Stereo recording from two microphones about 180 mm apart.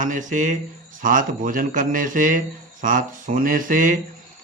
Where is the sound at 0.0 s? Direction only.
45° right (ahead or behind).